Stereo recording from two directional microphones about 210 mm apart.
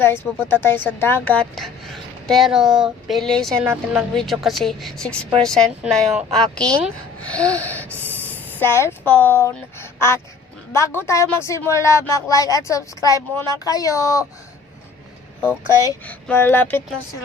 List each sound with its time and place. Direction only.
0.0 s speech: 10° left (ahead or behind)
15.4 s speech: 10° left (ahead or behind)